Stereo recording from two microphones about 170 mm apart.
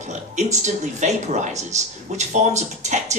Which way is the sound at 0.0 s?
45° right (ahead or behind).